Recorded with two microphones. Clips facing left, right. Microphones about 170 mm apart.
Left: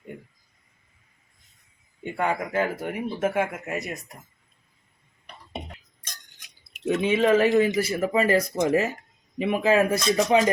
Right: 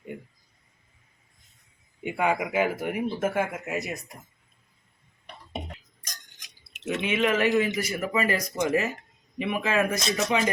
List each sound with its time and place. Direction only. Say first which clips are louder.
2.0 s speech: right 1 dB; 10° right (ahead or behind)
6.8 s speech: left 5 dB; 30° left (ahead or behind)